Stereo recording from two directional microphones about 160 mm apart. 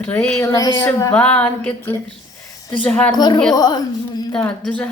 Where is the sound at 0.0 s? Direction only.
10° left (ahead or behind).